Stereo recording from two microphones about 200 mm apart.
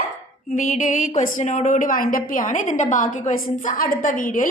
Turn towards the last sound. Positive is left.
turn(degrees=40)  # may be behind; listen again after turning